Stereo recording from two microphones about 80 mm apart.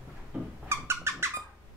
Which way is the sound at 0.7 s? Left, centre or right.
Right.